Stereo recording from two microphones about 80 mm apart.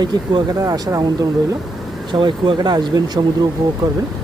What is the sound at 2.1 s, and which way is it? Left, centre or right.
Speech, right.